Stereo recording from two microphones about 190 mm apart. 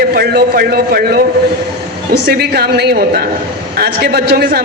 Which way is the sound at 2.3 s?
55° right (ahead or behind).